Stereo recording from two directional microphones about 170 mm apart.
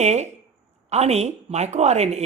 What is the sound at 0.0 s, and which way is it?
A woman's voice, 40° right (ahead or behind).